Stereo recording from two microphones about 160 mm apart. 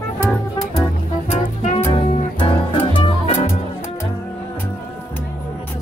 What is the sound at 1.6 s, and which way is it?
Music, 45° left (ahead or behind).